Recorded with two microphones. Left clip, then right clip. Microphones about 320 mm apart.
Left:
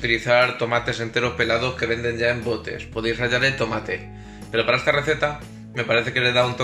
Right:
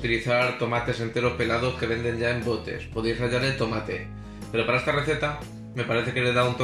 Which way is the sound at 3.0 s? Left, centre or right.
Left.